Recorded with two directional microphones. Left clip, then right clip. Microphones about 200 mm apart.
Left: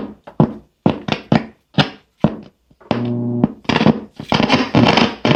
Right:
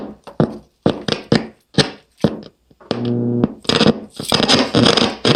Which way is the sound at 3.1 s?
20° left (ahead or behind).